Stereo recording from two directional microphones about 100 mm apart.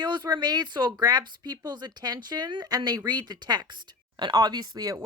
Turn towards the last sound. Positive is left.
turn(degrees=-40)  # may be behind; listen again after turning